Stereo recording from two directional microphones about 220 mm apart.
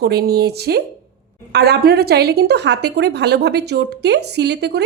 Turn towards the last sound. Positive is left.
turn(degrees=-50)  # may be behind; listen again after turning